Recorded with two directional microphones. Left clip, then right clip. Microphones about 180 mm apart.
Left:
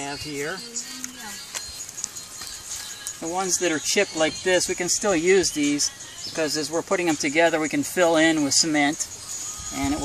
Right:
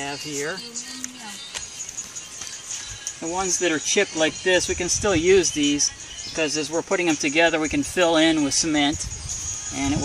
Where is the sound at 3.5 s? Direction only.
15° left (ahead or behind).